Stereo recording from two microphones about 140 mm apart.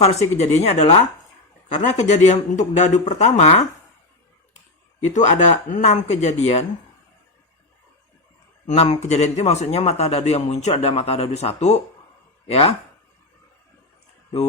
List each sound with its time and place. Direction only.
0.0 s a man's voice: 50° left (ahead or behind)
5.0 s speech: 60° left (ahead or behind)
8.6 s a man's voice: 50° left (ahead or behind)